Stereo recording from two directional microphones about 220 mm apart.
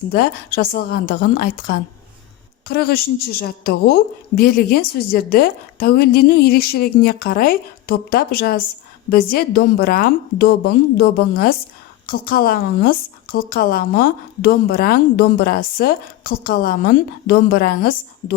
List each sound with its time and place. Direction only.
0.1 s a woman's voice: 40° left (ahead or behind)